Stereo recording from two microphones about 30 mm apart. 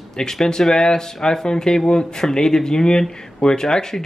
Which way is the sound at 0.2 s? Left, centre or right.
Left.